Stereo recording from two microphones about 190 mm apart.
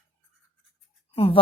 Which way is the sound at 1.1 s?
30° left (ahead or behind).